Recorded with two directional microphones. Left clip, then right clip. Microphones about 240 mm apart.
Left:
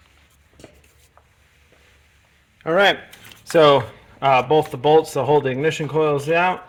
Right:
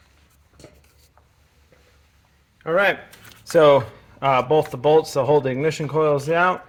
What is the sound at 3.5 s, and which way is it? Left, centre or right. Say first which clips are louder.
Speech: even; left.